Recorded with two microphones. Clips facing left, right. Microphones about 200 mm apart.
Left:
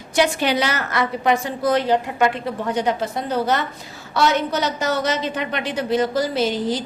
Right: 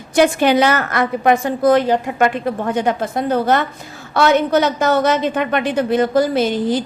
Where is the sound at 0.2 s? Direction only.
50° right (ahead or behind).